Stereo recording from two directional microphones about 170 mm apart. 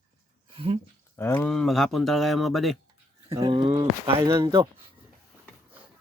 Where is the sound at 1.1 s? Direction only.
15° left (ahead or behind).